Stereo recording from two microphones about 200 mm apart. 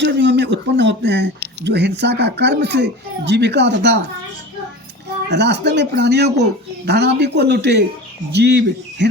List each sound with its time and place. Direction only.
0.0 s speech: 60° right (ahead or behind)
5.3 s speech: 60° right (ahead or behind)